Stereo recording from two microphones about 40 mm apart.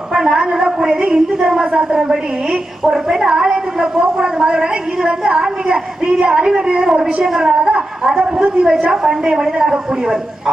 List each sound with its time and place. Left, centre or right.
0.1 s a woman's voice: centre
2.8 s a woman's voice: centre